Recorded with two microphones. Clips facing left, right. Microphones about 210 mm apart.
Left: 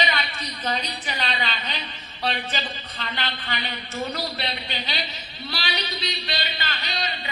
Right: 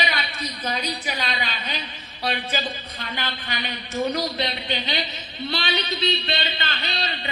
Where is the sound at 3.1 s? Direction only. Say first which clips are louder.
Even; 10° right (ahead or behind).